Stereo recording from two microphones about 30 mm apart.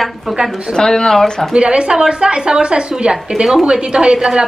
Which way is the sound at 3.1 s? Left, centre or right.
Right.